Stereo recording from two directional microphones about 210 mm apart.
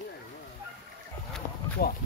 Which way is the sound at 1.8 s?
45° left (ahead or behind).